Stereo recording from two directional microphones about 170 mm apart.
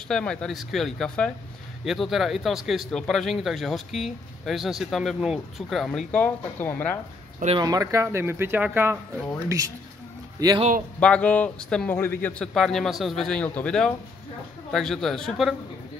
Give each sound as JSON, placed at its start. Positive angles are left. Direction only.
{"t": 0.1, "sound": "speech", "side_deg": 5}
{"t": 7.5, "sound": "speech", "side_deg": -25}
{"t": 10.4, "sound": "a man's voice", "side_deg": -20}
{"t": 11.0, "sound": "a man's voice", "side_deg": 5}